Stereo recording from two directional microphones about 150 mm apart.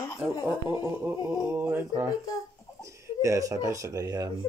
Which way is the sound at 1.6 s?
10° right (ahead or behind).